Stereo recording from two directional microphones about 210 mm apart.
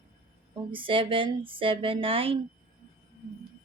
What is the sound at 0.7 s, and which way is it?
Speech, 25° right (ahead or behind).